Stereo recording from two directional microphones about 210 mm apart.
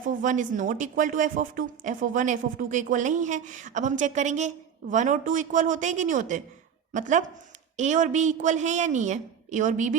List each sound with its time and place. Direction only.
0.0 s speech: 40° right (ahead or behind)